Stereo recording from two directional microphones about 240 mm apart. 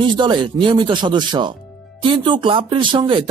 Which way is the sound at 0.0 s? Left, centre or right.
Centre.